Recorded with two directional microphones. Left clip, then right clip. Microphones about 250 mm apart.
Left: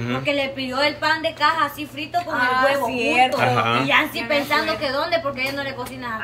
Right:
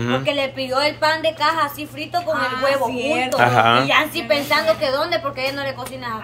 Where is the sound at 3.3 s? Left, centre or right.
Centre.